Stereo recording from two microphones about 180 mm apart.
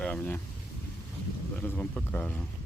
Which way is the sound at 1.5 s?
10° left (ahead or behind).